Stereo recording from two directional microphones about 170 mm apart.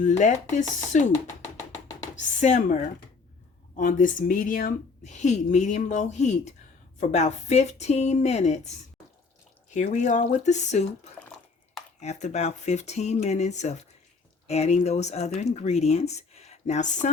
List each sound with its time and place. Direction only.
0.0 s speech: 45° left (ahead or behind)
2.1 s speech: 45° left (ahead or behind)
9.7 s speech: 45° left (ahead or behind)